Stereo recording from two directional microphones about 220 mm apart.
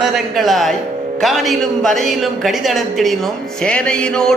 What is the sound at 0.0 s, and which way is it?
A woman's voice, centre (ahead or behind).